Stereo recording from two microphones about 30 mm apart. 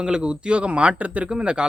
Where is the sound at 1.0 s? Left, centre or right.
Right.